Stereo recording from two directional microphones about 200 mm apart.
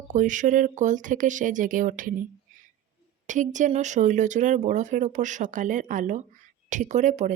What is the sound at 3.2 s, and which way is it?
A woman's voice, 40° right (ahead or behind).